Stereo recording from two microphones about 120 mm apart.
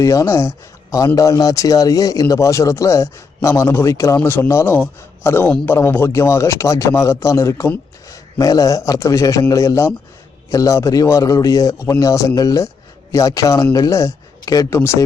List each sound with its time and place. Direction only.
0.0 s speech: 25° left (ahead or behind)